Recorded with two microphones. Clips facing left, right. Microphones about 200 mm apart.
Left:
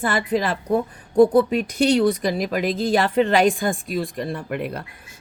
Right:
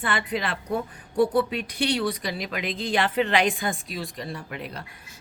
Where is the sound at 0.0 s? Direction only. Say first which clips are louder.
Left 6 dB; 40° left (ahead or behind).